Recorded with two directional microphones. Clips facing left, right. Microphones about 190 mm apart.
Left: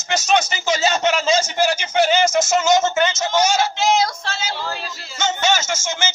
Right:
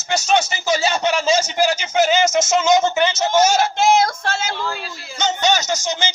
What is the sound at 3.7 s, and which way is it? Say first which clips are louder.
Female singing: right 3 dB; 50° right (ahead or behind).